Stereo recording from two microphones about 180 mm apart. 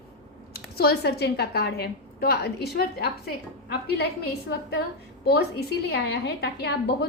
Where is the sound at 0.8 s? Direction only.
60° left (ahead or behind).